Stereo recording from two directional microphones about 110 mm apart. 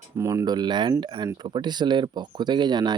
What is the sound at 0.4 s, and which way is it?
Speech, 40° right (ahead or behind).